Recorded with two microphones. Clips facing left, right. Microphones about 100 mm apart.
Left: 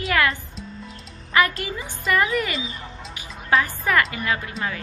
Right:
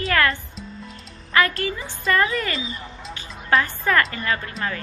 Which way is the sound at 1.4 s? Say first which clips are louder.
Even; 15° left (ahead or behind).